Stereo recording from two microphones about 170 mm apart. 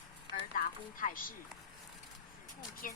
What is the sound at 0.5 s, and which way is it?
Music, 55° left (ahead or behind).